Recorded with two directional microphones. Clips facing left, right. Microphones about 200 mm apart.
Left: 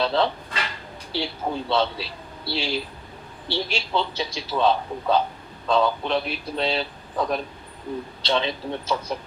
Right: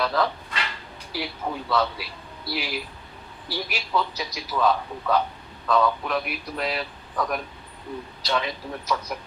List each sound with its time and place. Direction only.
0.0 s a man's voice: 25° left (ahead or behind)